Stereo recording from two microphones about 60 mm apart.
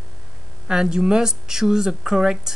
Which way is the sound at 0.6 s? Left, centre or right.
Centre.